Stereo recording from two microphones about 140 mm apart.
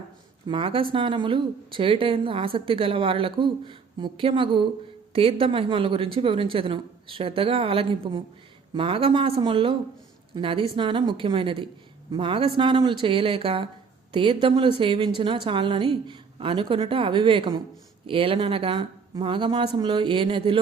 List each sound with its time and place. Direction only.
0.4 s a woman's voice: 35° right (ahead or behind)